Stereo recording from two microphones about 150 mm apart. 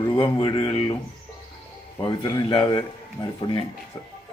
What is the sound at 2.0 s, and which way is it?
Speech, 30° left (ahead or behind).